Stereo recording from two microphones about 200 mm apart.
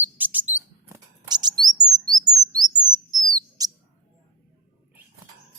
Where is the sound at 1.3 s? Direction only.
20° right (ahead or behind).